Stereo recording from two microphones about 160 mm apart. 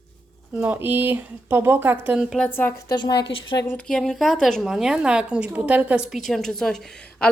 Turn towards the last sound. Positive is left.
turn(degrees=5)  # may be behind; listen again after turning